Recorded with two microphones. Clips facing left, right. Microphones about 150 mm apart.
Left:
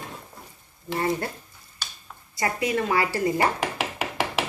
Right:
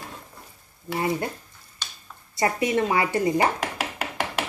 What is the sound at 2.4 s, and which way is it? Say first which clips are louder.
A woman's voice: right 3 dB; 25° right (ahead or behind).